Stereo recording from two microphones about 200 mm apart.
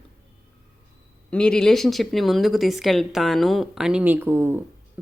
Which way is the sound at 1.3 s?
5° left (ahead or behind).